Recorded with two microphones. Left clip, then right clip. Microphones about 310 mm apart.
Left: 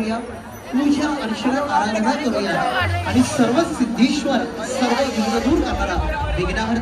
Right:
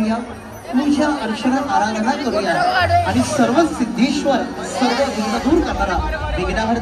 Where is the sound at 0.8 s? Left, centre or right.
Right.